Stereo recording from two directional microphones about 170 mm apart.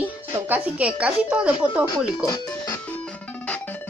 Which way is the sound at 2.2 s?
20° left (ahead or behind).